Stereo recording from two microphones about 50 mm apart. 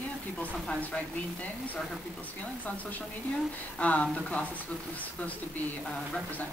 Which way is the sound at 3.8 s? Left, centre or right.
Left.